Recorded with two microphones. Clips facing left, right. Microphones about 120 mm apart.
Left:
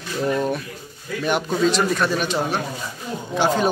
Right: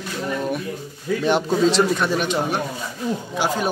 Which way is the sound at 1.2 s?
30° right (ahead or behind).